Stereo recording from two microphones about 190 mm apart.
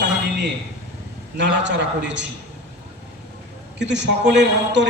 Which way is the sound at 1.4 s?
65° right (ahead or behind).